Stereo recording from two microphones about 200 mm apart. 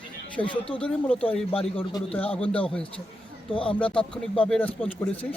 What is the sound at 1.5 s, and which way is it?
Speech, 25° left (ahead or behind).